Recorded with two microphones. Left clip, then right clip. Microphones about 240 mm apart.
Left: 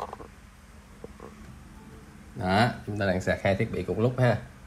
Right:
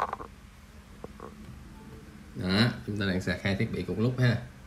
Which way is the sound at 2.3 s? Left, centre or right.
Centre.